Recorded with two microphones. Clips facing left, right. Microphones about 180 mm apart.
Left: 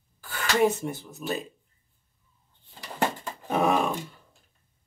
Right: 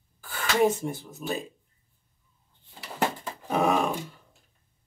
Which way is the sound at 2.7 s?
5° right (ahead or behind).